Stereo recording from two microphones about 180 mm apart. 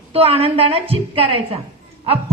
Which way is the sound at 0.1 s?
35° right (ahead or behind).